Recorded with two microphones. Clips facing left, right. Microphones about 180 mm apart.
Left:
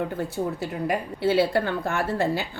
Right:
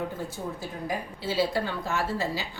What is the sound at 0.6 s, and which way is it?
Speech, 65° left (ahead or behind).